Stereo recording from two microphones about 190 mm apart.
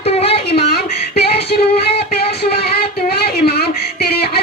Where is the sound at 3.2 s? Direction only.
55° left (ahead or behind).